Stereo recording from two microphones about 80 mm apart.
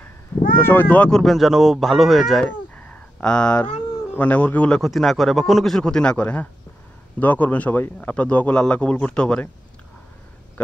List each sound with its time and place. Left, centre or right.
0.6 s a man's voice: left
1.1 s speech: centre
2.4 s speech: centre
4.8 s a man's voice: centre